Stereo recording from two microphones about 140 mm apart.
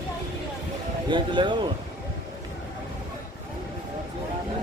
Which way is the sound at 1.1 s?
35° right (ahead or behind).